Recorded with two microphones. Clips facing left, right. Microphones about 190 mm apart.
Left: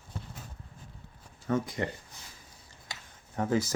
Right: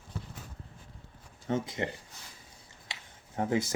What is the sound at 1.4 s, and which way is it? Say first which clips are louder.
Speech: left 1 dB; 25° right (ahead or behind).